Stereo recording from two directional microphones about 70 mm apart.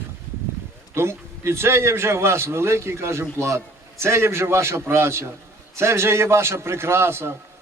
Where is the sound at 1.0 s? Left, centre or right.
Right.